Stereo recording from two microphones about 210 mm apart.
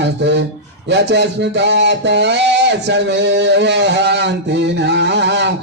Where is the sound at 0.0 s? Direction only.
55° right (ahead or behind).